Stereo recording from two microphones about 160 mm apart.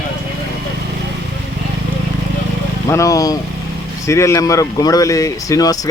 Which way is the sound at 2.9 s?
20° left (ahead or behind).